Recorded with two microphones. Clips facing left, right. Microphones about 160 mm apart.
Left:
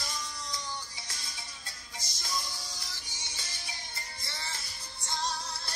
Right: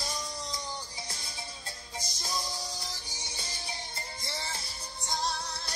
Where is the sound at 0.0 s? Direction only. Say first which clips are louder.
Right 3 dB; 30° right (ahead or behind).